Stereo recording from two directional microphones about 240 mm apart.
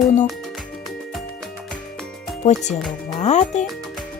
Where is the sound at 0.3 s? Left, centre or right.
Centre.